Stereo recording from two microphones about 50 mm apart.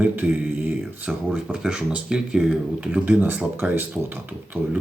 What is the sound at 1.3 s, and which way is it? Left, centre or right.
A man's voice, centre.